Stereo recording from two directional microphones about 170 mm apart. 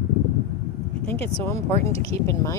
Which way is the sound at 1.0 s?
10° left (ahead or behind).